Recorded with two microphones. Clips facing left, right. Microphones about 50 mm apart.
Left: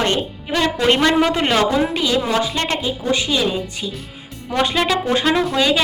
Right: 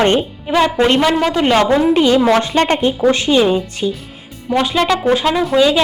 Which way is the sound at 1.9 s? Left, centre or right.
Right.